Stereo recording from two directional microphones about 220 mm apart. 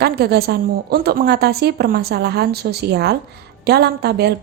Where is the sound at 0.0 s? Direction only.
45° right (ahead or behind).